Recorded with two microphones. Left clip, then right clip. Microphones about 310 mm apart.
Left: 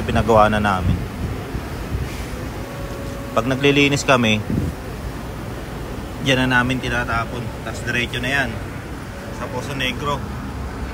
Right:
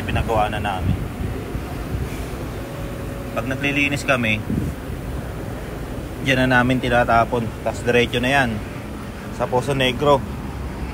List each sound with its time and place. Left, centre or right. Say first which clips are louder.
0.3 s speech: left 7 dB; left
3.3 s a man's voice: left 5 dB; centre
6.2 s speech: even; centre
9.6 s speech: right 4 dB; centre